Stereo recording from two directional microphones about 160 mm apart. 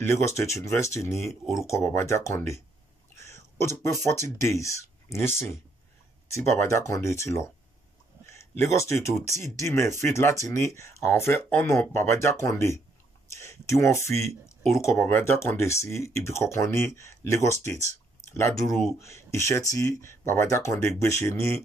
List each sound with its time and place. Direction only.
0.0 s speech: 15° left (ahead or behind)
8.3 s a sound: 15° left (ahead or behind)
9.2 s speech: 15° left (ahead or behind)
14.2 s a sound: 20° left (ahead or behind)
14.8 s speech: 15° left (ahead or behind)
18.9 s speech: 20° left (ahead or behind)